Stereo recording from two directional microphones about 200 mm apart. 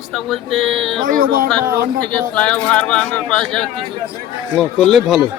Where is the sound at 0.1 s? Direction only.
Centre (ahead or behind).